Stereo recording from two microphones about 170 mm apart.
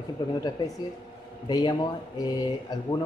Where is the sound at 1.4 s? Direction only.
25° left (ahead or behind).